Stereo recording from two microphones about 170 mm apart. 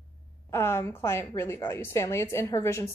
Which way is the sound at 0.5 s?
15° left (ahead or behind).